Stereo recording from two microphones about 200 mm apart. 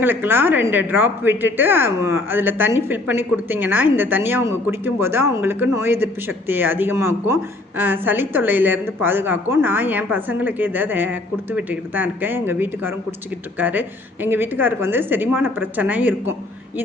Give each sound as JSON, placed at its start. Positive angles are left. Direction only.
{"t": 0.0, "sound": "a woman's voice", "side_deg": -10}